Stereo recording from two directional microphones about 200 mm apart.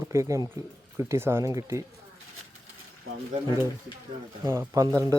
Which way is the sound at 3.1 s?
90° right.